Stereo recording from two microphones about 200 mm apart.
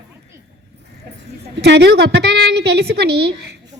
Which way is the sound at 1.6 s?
60° right (ahead or behind).